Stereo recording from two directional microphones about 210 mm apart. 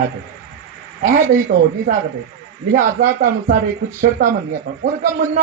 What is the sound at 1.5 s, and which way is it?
Speech, 35° right (ahead or behind).